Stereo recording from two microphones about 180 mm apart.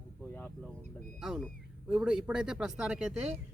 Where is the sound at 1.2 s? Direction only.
5° right (ahead or behind).